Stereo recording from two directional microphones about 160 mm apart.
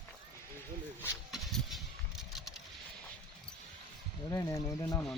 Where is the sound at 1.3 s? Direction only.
Centre (ahead or behind).